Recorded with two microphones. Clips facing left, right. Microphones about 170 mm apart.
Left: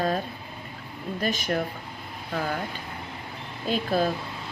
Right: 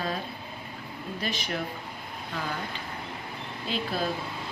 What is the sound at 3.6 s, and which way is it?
Speech, 45° left (ahead or behind).